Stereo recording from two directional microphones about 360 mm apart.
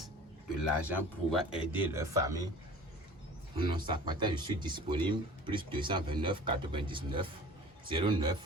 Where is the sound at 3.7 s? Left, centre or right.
Centre.